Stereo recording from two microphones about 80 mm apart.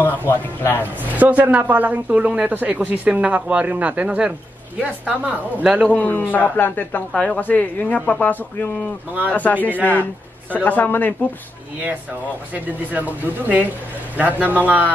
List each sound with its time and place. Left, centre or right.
0.3 s speech: left
1.1 s a woman's voice: right
5.9 s speech: centre
12.5 s speech: centre